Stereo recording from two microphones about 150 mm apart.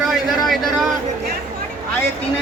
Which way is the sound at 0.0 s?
Centre (ahead or behind).